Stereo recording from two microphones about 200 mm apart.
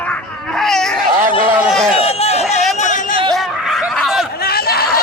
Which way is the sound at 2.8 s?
40° left (ahead or behind).